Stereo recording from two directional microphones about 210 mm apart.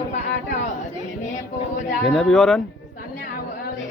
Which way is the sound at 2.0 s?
Centre (ahead or behind).